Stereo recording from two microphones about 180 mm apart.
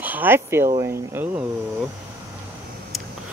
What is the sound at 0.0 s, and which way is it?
Speech, 10° right (ahead or behind).